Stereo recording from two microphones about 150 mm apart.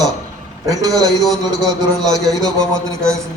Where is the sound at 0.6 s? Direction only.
20° right (ahead or behind).